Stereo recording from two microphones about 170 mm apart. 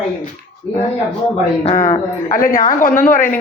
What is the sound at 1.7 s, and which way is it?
A woman's voice, 45° left (ahead or behind).